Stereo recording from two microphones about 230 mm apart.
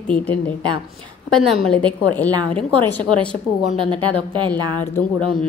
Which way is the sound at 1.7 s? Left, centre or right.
Centre.